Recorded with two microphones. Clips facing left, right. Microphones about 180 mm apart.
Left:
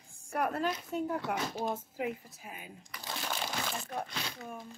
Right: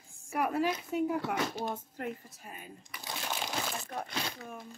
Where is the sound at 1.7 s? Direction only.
5° left (ahead or behind).